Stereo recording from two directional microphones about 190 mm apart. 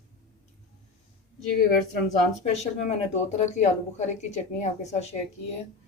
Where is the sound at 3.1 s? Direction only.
35° left (ahead or behind).